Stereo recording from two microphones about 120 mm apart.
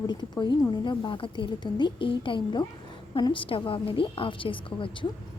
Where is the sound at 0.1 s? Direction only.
40° left (ahead or behind).